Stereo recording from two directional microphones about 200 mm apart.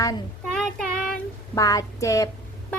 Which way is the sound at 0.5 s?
Centre (ahead or behind).